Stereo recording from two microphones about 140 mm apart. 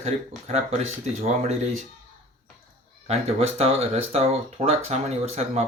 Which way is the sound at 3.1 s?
50° right (ahead or behind).